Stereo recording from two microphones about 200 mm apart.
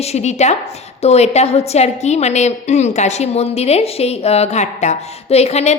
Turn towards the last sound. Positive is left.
turn(degrees=35)  # may be behind; listen again after turning